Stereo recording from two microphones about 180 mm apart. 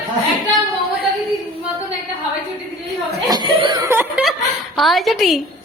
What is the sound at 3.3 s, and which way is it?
Chuckle, 25° right (ahead or behind).